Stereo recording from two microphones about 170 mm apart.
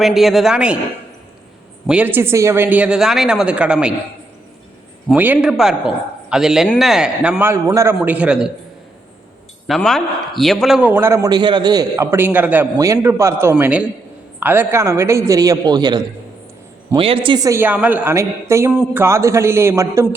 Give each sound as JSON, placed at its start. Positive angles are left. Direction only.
{"t": 0.0, "sound": "a man's voice", "side_deg": 0}
{"t": 1.9, "sound": "a man's voice", "side_deg": -10}
{"t": 5.1, "sound": "a man's voice", "side_deg": -10}
{"t": 9.6, "sound": "a man's voice", "side_deg": 0}
{"t": 18.7, "sound": "a man's voice", "side_deg": -5}
{"t": 19.0, "sound": "a man's voice", "side_deg": -15}